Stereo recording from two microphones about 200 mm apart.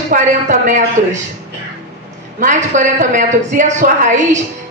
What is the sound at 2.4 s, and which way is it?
A man's voice, 40° right (ahead or behind).